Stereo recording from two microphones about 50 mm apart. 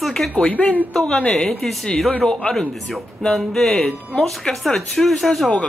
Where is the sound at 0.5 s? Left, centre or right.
Left.